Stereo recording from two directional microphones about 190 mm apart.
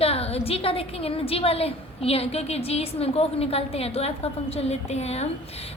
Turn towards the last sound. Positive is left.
turn(degrees=35)  # may be behind; listen again after turning